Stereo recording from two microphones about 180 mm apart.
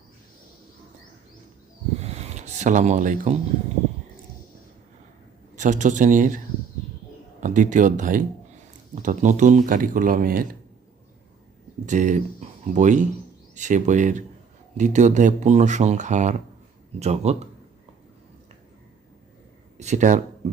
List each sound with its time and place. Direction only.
2.0 s a sound: 40° right (ahead or behind)
5.5 s speech: 45° right (ahead or behind)
7.4 s speech: 45° right (ahead or behind)
11.9 s speech: 45° right (ahead or behind)
19.7 s speech: 40° right (ahead or behind)